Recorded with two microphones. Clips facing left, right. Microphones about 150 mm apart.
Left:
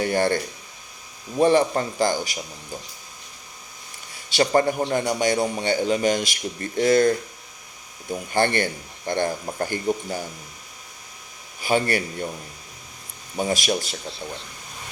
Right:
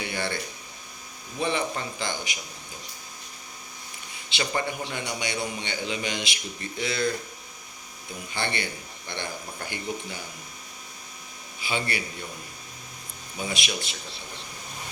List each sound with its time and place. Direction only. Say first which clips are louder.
0.0 s a man's voice: left 10 dB; 45° left (ahead or behind)
4.4 s a man's voice: left 10 dB; 40° left (ahead or behind)
8.1 s a man's voice: left 10 dB; 50° left (ahead or behind)
11.6 s a man's voice: left 8 dB; 45° left (ahead or behind)
13.3 s a man's voice: left 8 dB; 45° left (ahead or behind)